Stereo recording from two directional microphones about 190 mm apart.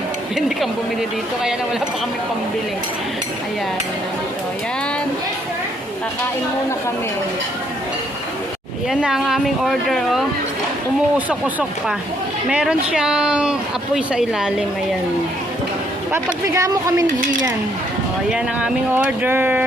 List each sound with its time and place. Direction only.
0.3 s speech: centre (ahead or behind)
8.9 s speech: centre (ahead or behind)
11.3 s speech: 5° right (ahead or behind)
16.1 s speech: 15° right (ahead or behind)
18.3 s speech: 5° right (ahead or behind)